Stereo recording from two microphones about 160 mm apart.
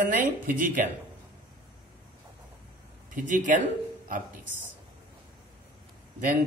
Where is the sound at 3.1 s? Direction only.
55° right (ahead or behind).